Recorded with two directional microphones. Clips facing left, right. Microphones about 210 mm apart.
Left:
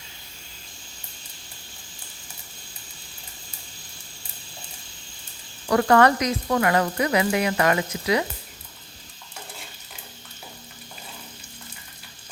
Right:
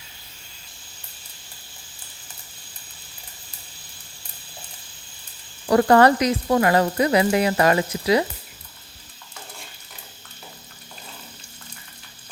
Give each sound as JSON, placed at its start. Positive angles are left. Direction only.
{"t": 5.6, "sound": "speech", "side_deg": -30}